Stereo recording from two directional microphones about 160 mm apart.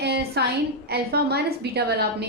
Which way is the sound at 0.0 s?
90° right.